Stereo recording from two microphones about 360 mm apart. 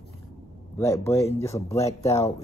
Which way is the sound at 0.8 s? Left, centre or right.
Centre.